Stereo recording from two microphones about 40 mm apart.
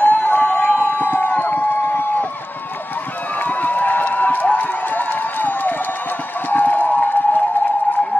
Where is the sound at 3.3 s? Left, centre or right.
Left.